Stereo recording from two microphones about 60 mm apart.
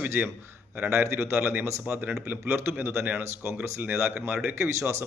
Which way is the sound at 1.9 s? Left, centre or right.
Right.